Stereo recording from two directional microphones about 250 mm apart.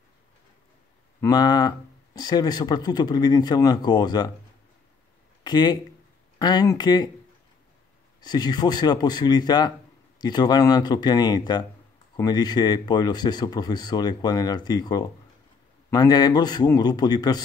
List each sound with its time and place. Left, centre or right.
1.2 s speech: centre
5.4 s speech: centre
8.2 s speech: centre